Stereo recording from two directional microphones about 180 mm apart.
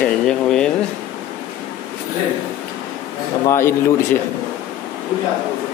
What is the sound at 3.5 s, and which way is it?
Speech, 15° left (ahead or behind).